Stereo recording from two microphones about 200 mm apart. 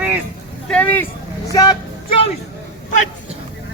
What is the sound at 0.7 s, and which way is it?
Speech, 5° left (ahead or behind).